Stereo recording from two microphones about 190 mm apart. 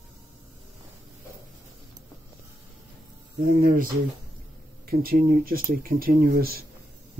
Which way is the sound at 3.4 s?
45° right (ahead or behind).